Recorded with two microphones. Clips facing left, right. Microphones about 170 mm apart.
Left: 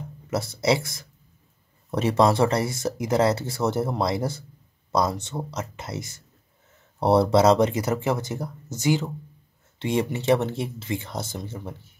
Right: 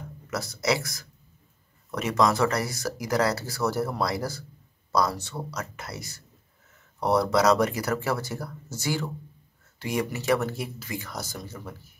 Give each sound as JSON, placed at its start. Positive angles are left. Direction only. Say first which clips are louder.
{"t": 0.3, "sound": "speech", "louder": "left 4 dB", "side_deg": 25}